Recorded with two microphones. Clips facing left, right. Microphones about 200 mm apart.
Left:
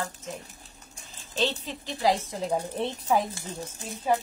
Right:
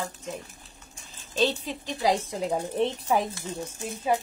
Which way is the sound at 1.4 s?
15° right (ahead or behind).